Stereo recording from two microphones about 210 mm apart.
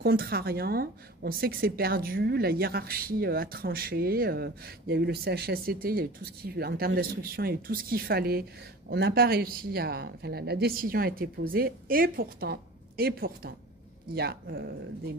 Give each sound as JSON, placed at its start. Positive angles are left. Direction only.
{"t": 0.0, "sound": "a woman's voice", "side_deg": -45}